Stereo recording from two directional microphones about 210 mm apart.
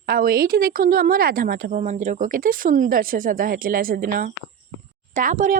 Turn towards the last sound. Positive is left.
turn(degrees=-40)  # may be behind; listen again after turning